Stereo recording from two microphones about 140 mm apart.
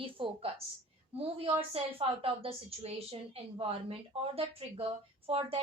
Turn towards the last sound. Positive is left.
turn(degrees=-45)  # may be behind; listen again after turning